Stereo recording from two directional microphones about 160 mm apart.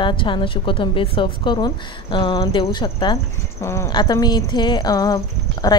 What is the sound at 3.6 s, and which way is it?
A woman's voice, 15° left (ahead or behind).